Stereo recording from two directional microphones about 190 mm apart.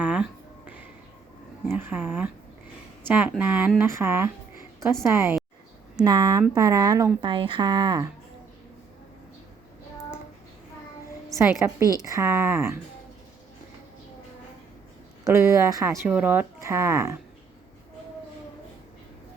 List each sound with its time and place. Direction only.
0.0 s a sound: 5° right (ahead or behind)
1.6 s speech: 10° right (ahead or behind)
11.3 s speech: 15° right (ahead or behind)
15.2 s speech: 15° right (ahead or behind)